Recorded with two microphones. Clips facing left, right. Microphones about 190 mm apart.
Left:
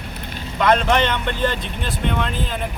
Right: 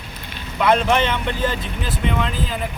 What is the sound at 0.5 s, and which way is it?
Speech, 5° right (ahead or behind).